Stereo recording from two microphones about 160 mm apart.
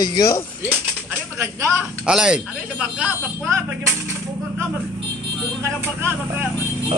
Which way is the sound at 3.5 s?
20° right (ahead or behind).